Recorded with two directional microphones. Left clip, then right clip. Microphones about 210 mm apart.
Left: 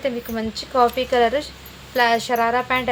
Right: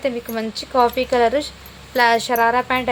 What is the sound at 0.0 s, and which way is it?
Speech, 20° right (ahead or behind).